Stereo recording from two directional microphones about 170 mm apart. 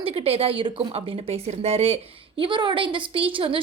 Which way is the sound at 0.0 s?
35° right (ahead or behind).